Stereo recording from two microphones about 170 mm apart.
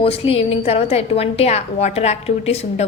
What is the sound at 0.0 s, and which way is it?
A woman's voice, 35° left (ahead or behind).